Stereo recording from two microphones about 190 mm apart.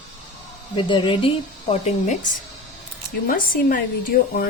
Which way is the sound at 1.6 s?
40° left (ahead or behind).